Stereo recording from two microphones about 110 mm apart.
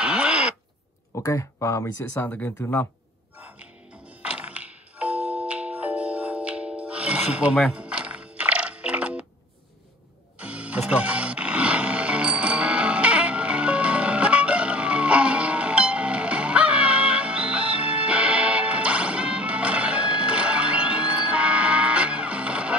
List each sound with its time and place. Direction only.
0.0 s a sound: 10° right (ahead or behind)
1.1 s speech: 25° left (ahead or behind)
2.2 s speech: 15° left (ahead or behind)
3.3 s music: 15° right (ahead or behind)
10.4 s music: 10° right (ahead or behind)